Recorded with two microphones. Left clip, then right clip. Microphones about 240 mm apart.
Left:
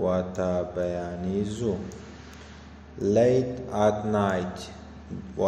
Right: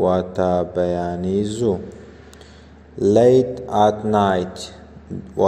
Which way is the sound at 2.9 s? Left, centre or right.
Right.